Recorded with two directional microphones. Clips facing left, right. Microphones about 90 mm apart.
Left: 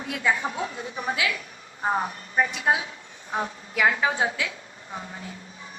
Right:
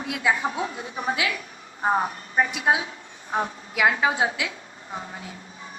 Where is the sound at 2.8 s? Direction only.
25° right (ahead or behind).